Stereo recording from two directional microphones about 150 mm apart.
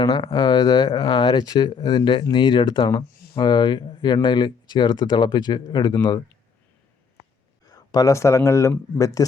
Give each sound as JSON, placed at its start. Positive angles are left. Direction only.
{"t": 0.0, "sound": "speech", "side_deg": 30}
{"t": 7.7, "sound": "speech", "side_deg": 25}